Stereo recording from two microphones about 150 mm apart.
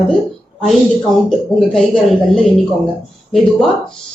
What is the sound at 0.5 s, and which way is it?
A woman's voice, 5° left (ahead or behind).